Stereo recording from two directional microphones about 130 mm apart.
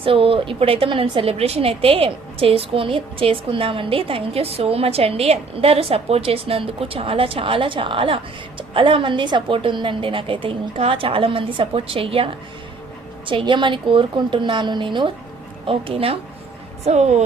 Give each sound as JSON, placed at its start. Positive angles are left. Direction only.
{"t": 0.0, "sound": "a woman's voice", "side_deg": -45}
{"t": 16.8, "sound": "speech", "side_deg": -60}